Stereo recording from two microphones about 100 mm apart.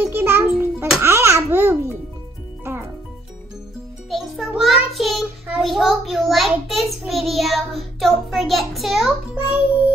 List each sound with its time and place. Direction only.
0.0 s music: 20° right (ahead or behind)
1.0 s babbling: 30° right (ahead or behind)
2.6 s music: 25° right (ahead or behind)
4.6 s child singing: centre (ahead or behind)
9.3 s music: 15° right (ahead or behind)